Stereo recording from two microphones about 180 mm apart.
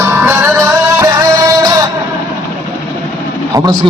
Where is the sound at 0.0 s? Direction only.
15° right (ahead or behind).